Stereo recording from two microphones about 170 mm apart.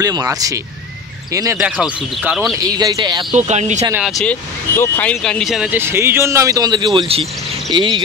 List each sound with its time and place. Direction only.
0.0 s speech: 20° right (ahead or behind)
1.6 s speech: 5° right (ahead or behind)
2.5 s speech: 20° right (ahead or behind)
3.3 s speech: 40° right (ahead or behind)
4.2 s speech: 10° left (ahead or behind)
5.8 s speech: 15° right (ahead or behind)